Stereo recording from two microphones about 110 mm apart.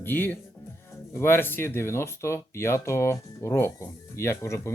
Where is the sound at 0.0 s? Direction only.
20° left (ahead or behind).